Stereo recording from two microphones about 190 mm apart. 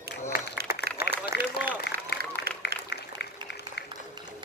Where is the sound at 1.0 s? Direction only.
55° left (ahead or behind).